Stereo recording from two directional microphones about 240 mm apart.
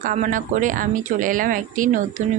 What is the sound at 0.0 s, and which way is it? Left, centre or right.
A woman's voice, right.